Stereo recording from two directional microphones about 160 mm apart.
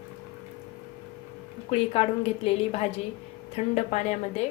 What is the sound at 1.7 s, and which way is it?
A woman's voice, 35° left (ahead or behind).